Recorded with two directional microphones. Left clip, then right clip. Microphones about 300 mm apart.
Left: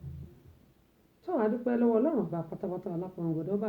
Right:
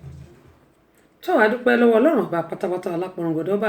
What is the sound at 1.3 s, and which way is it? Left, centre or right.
A woman's voice, centre.